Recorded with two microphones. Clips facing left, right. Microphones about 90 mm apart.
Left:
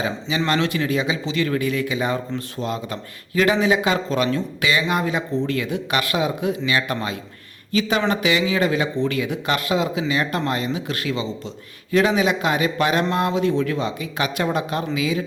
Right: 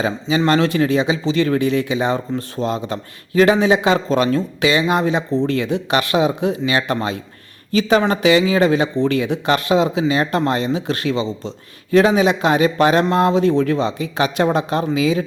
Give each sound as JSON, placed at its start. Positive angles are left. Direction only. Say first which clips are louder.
{"t": 0.0, "sound": "a man's voice", "louder": "right 5 dB", "side_deg": -35}